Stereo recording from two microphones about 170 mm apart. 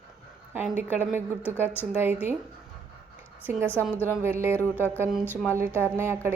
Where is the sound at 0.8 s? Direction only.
10° right (ahead or behind).